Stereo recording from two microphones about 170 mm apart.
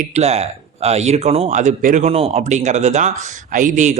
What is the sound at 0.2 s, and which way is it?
A man's voice, 40° right (ahead or behind).